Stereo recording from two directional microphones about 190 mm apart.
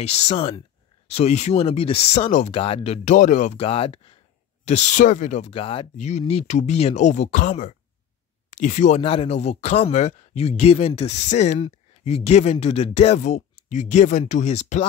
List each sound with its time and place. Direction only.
0.0 s speech: 35° left (ahead or behind)